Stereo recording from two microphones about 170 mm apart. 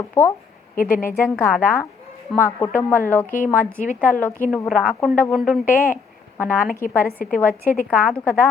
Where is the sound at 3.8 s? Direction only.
50° left (ahead or behind).